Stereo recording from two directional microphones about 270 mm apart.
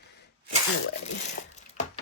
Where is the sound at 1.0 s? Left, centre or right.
Left.